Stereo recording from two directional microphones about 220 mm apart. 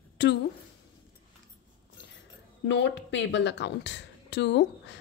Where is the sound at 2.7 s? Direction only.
55° left (ahead or behind).